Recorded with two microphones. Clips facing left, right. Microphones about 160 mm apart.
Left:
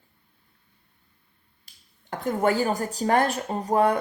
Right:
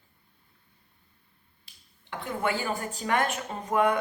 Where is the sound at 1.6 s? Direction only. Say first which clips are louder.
Left 1 dB; 45° left (ahead or behind).